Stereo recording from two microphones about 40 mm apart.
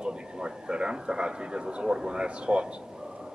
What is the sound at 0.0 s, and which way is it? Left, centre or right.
A man's voice, right.